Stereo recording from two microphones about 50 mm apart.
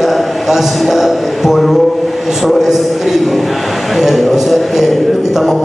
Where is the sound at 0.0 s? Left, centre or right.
Centre.